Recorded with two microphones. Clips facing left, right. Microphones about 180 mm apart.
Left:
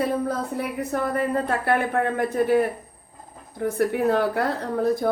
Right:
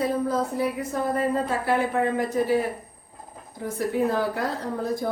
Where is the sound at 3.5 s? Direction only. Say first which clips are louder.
Left 3 dB; 60° left (ahead or behind).